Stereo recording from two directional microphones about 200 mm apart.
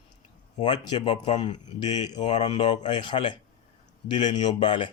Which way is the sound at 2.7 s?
35° left (ahead or behind).